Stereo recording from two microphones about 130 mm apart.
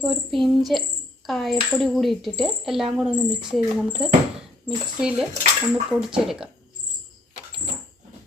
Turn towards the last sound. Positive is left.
turn(degrees=-5)  # may be behind; listen again after turning